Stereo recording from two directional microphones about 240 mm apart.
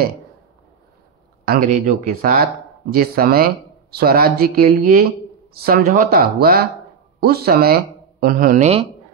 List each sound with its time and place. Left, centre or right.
1.4 s speech: right